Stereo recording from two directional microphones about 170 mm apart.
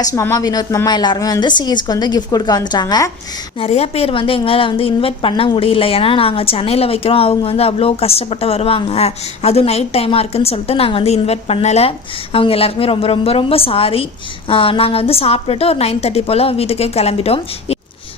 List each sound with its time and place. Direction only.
0.0 s a woman's voice: 20° left (ahead or behind)
3.6 s a woman's voice: 35° left (ahead or behind)